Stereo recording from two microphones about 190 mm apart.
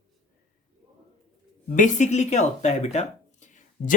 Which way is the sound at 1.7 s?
40° left (ahead or behind).